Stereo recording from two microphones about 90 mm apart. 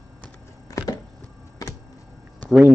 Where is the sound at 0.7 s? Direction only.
45° left (ahead or behind).